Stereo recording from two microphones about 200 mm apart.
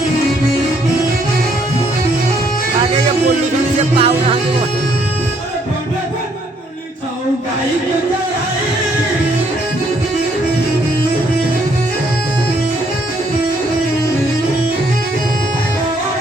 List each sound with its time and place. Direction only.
3.9 s music: 30° right (ahead or behind)